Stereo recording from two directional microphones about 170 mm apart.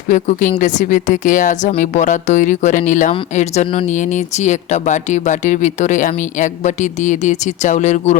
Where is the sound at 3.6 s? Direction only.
30° left (ahead or behind).